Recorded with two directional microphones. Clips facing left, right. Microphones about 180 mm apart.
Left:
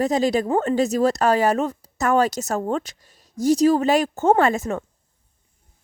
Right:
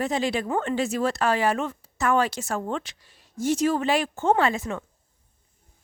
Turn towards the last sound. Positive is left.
turn(degrees=45)  # may be behind; listen again after turning